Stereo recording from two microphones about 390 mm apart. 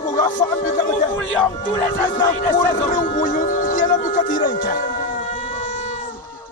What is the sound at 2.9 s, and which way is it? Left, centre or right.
Music, centre.